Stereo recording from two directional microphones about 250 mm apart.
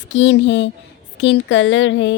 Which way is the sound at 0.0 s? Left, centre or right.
Left.